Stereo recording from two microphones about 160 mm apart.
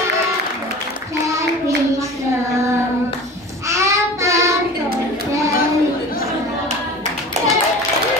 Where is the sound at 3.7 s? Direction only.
20° right (ahead or behind).